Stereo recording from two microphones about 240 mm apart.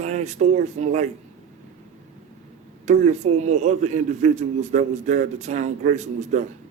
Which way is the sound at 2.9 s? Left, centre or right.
Right.